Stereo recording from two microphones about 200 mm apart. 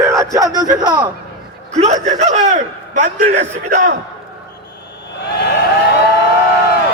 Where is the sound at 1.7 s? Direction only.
35° right (ahead or behind).